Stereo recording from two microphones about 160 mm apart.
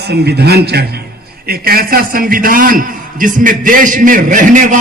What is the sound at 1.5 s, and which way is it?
A man's voice, 70° right (ahead or behind).